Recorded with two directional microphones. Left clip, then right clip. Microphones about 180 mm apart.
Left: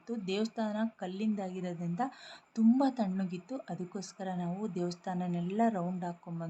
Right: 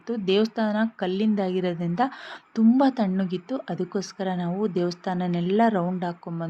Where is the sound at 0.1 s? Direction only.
25° right (ahead or behind).